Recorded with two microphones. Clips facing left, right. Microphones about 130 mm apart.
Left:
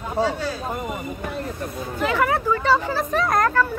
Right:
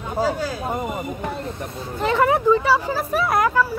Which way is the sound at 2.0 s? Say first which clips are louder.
Right 3 dB; 30° right (ahead or behind).